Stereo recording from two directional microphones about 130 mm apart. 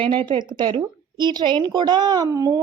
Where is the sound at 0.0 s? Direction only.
40° right (ahead or behind).